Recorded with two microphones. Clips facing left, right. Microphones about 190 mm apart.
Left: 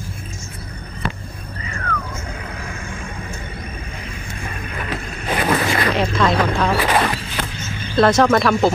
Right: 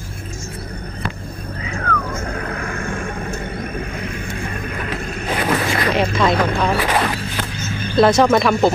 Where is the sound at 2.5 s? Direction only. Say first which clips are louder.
Right 6 dB; 60° right (ahead or behind).